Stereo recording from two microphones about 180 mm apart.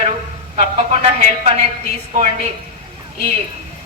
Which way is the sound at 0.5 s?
40° right (ahead or behind).